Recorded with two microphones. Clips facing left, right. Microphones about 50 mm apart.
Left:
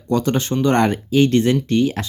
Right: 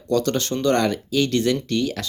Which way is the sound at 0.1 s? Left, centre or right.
Left.